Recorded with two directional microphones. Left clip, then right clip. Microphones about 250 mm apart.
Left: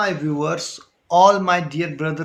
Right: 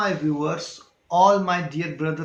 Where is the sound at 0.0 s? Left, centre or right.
Left.